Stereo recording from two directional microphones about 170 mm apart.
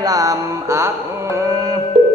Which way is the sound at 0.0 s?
20° right (ahead or behind).